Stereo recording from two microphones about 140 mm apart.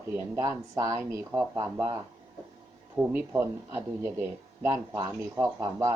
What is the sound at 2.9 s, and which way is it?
Speech, 10° right (ahead or behind).